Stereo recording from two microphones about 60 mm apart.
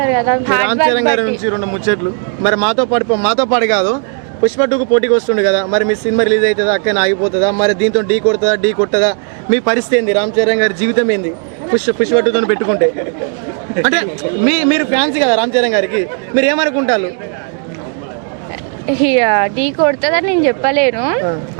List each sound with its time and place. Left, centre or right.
0.0 s speech: right
18.9 s speech: centre